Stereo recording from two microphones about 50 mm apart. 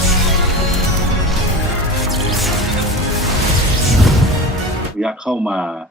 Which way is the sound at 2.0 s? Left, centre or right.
Centre.